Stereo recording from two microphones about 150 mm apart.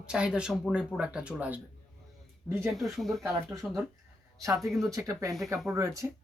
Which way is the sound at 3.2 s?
20° right (ahead or behind).